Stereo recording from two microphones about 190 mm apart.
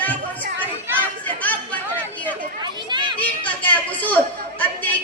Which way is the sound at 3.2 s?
10° left (ahead or behind).